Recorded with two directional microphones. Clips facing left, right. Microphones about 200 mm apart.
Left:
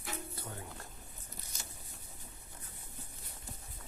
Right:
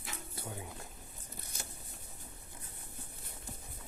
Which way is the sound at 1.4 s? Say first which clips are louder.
Right 5 dB; 55° right (ahead or behind).